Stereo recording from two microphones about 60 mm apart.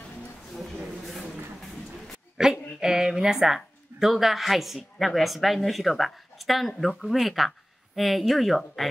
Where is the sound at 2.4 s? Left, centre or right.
Centre.